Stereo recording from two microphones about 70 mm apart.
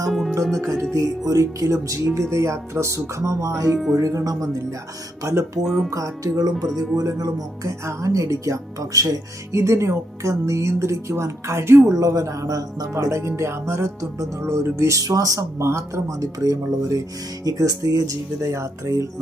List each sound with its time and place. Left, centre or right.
0.1 s music: centre
0.6 s speech: right
0.9 s speech: right
3.7 s music: centre
3.9 s speech: right
5.6 s music: centre
5.9 s speech: right
11.9 s speech: right
13.0 s speech: right
16.2 s speech: right